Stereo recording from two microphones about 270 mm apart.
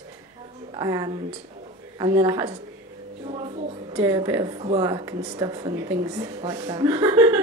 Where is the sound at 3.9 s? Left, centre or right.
Centre.